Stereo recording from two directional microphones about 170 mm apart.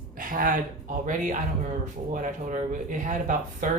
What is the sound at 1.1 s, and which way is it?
A man's voice, 50° right (ahead or behind).